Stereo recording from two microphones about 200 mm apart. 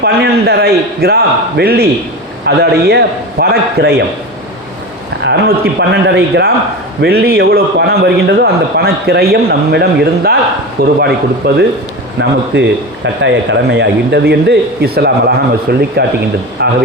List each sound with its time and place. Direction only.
0.0 s a man's voice: 55° right (ahead or behind)
5.2 s a man's voice: 55° right (ahead or behind)